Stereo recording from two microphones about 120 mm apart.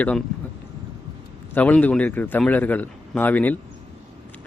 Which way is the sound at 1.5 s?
15° left (ahead or behind).